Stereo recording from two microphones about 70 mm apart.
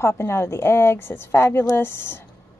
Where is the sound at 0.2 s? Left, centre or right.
Left.